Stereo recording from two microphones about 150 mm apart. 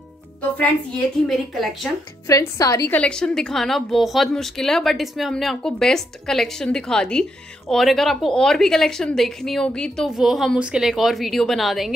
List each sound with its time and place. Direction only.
0.6 s a woman's voice: 5° left (ahead or behind)
2.2 s speech: 20° left (ahead or behind)
2.9 s a woman's voice: 5° left (ahead or behind)